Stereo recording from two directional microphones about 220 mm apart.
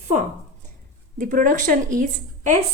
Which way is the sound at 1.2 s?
35° right (ahead or behind).